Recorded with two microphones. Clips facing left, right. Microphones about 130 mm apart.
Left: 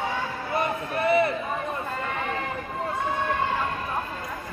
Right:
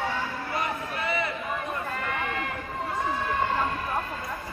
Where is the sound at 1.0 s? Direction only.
50° left (ahead or behind).